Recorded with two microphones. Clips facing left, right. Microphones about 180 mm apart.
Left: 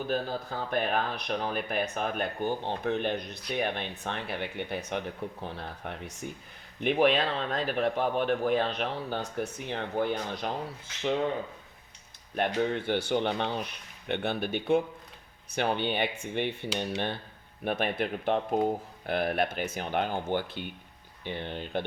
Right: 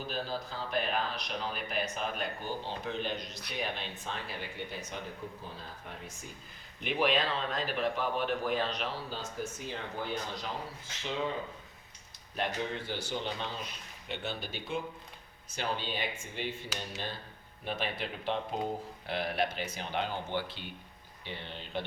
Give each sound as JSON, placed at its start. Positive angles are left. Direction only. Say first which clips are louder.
{"t": 0.1, "sound": "speech", "louder": "left 5 dB", "side_deg": 55}
{"t": 6.8, "sound": "a man's voice", "louder": "left 5 dB", "side_deg": 55}
{"t": 12.7, "sound": "a man's voice", "louder": "left 9 dB", "side_deg": 60}